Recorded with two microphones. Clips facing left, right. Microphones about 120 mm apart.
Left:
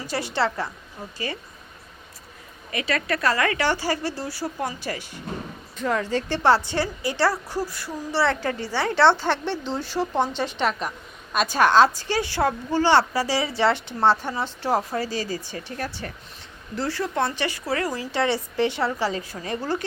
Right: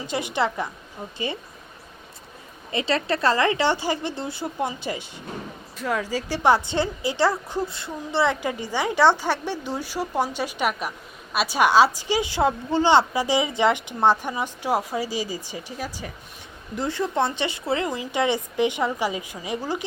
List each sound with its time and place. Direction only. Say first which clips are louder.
0.0 s a woman's voice: even; 20° right (ahead or behind)
2.7 s speech: right 2 dB; 25° right (ahead or behind)
5.7 s a woman's voice: left 2 dB; 5° right (ahead or behind)